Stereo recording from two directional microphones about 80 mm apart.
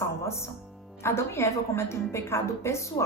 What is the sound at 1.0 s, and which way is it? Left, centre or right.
A woman's voice, left.